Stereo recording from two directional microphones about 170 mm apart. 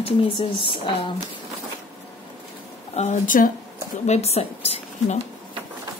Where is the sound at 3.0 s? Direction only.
50° left (ahead or behind).